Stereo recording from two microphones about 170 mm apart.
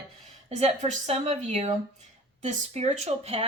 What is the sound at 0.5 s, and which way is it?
Speech, 40° right (ahead or behind).